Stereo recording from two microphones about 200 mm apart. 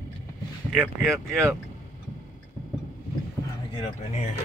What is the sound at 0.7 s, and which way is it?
Speech, centre (ahead or behind).